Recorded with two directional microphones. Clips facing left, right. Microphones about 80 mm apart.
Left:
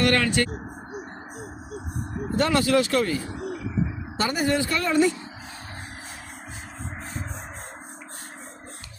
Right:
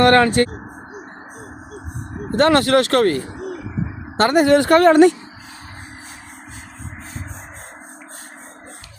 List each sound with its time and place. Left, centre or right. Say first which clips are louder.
0.0 s speech: right 9 dB; right
2.3 s speech: right 7 dB; right
4.2 s speech: right 10 dB; right